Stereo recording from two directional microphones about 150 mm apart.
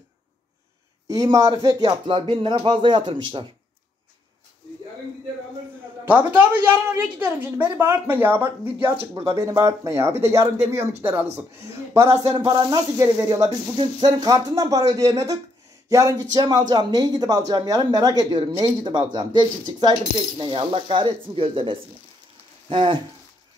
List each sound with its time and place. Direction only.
1.0 s speech: 25° right (ahead or behind)
6.0 s speech: 10° right (ahead or behind); by 22.9 s 35° right (ahead or behind)